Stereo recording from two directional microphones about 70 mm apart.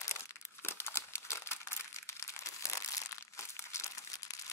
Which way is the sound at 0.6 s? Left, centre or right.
Left.